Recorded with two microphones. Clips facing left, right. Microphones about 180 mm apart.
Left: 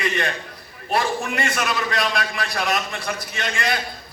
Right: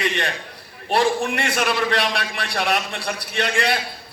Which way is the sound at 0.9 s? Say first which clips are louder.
Right 3 dB; 30° right (ahead or behind).